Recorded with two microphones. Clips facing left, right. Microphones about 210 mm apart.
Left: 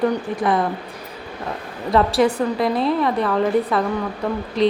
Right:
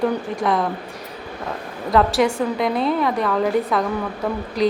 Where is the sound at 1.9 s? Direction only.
Centre (ahead or behind).